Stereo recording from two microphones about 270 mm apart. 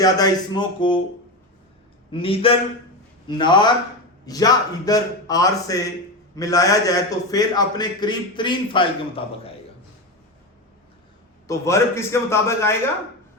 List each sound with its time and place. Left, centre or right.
0.0 s a man's voice: centre
2.1 s a man's voice: centre
11.4 s a man's voice: centre